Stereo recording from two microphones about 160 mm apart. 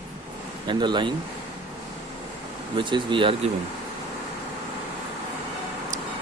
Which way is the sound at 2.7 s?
30° right (ahead or behind).